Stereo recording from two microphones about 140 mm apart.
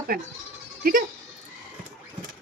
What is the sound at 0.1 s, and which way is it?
Speech, 90° right.